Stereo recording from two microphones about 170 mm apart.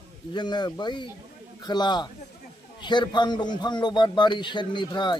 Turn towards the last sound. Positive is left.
turn(degrees=25)  # may be behind; listen again after turning